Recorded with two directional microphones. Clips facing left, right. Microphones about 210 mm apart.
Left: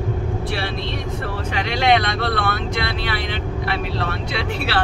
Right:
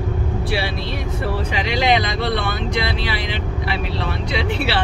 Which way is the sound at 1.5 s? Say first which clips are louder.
Left 1 dB; centre (ahead or behind).